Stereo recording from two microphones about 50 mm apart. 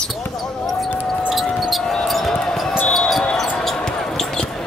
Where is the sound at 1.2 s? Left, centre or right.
Centre.